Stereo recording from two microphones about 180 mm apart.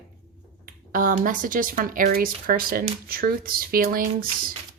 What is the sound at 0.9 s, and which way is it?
Speech, 50° right (ahead or behind).